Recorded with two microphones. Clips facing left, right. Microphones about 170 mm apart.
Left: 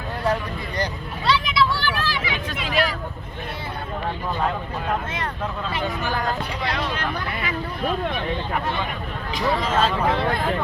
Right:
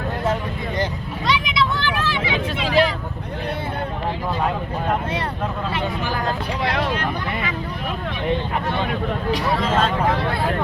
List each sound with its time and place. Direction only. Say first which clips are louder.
1.3 s vehicle: left 1 dB; 20° right (ahead or behind)
9.6 s vehicle: even; centre (ahead or behind)